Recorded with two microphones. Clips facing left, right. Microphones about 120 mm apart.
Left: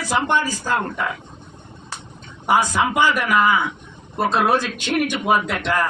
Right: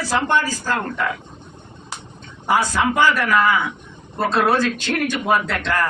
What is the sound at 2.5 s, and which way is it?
A man's voice, 15° left (ahead or behind).